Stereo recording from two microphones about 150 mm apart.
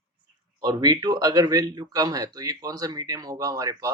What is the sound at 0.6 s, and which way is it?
Speech, 30° right (ahead or behind).